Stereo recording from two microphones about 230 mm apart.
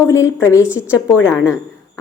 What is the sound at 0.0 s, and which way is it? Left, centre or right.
Speech, centre.